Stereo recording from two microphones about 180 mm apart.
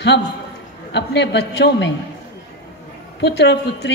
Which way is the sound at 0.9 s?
70° left (ahead or behind).